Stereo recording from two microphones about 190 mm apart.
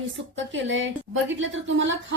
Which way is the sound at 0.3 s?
75° right (ahead or behind).